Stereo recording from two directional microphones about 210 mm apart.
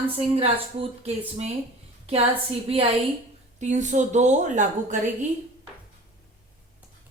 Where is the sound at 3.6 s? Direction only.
35° right (ahead or behind).